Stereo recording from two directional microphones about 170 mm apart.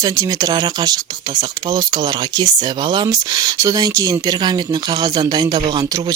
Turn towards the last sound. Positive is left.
turn(degrees=-25)  # may be behind; listen again after turning